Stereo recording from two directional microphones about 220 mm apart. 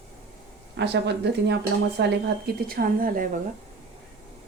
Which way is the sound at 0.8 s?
50° right (ahead or behind).